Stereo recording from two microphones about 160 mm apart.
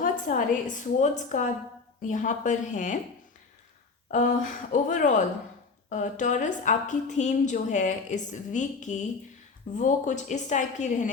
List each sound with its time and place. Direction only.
0.0 s a woman's voice: 55° left (ahead or behind)
4.1 s a woman's voice: 50° left (ahead or behind)